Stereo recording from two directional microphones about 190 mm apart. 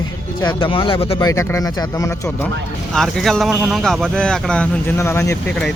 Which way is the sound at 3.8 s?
Centre (ahead or behind).